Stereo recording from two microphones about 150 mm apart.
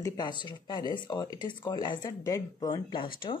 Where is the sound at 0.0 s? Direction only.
30° left (ahead or behind).